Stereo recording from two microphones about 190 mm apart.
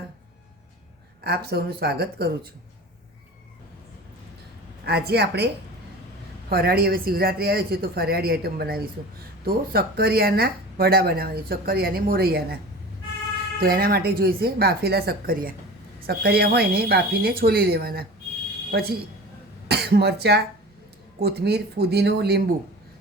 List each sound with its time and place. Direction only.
1.2 s a woman's voice: 55° right (ahead or behind)
4.9 s a woman's voice: 55° right (ahead or behind)
6.5 s a woman's voice: 55° right (ahead or behind)
13.6 s a woman's voice: 50° right (ahead or behind)